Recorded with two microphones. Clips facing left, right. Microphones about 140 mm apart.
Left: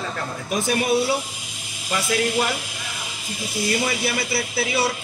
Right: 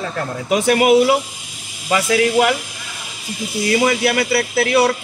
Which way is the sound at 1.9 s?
90° right.